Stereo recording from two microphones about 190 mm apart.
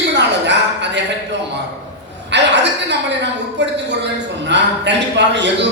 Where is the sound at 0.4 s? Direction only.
65° right (ahead or behind).